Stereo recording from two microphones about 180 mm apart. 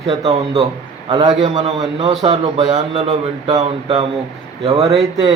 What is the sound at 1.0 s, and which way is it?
Speech, 25° right (ahead or behind).